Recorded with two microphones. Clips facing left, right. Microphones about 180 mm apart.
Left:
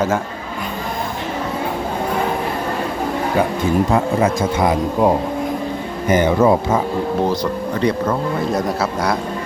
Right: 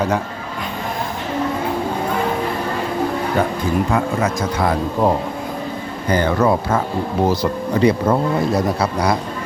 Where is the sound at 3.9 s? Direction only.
30° left (ahead or behind).